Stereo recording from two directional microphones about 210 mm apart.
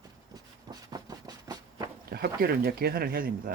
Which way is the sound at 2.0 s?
45° right (ahead or behind).